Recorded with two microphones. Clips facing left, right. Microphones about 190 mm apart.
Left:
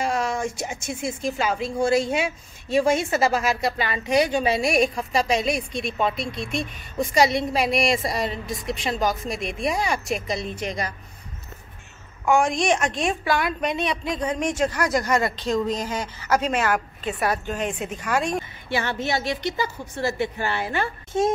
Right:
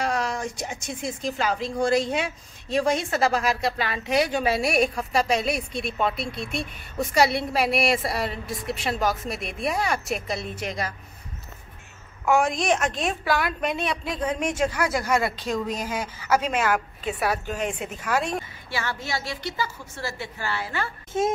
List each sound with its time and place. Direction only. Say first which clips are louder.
0.0 s a sound: left 2 dB; centre (ahead or behind)
0.6 s a woman's voice: left 2 dB; centre (ahead or behind)
12.3 s speech: left 1 dB; 5° right (ahead or behind)
18.7 s a woman's voice: left 5 dB; 20° left (ahead or behind)